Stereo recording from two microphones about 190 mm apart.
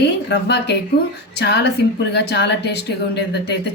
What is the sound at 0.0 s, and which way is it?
A woman's voice, 60° left (ahead or behind).